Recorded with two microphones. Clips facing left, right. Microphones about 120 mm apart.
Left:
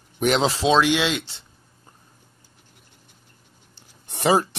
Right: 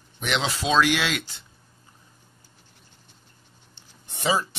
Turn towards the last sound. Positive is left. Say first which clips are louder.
# left 5 dB
turn(degrees=65)  # may be behind; listen again after turning